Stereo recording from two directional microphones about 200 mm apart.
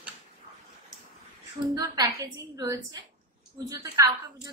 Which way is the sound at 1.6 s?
20° right (ahead or behind).